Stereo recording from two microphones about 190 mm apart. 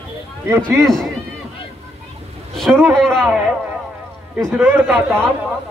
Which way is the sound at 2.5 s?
Centre (ahead or behind).